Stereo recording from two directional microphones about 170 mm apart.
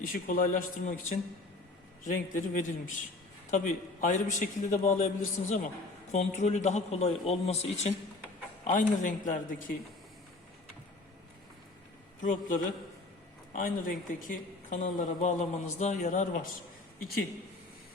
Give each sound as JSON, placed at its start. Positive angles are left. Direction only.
{"t": 0.0, "sound": "a man's voice", "side_deg": 55}
{"t": 8.6, "sound": "speech", "side_deg": 50}
{"t": 13.5, "sound": "speech", "side_deg": 50}